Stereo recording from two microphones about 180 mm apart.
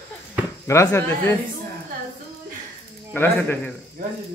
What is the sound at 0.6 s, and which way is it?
Speech, 15° left (ahead or behind).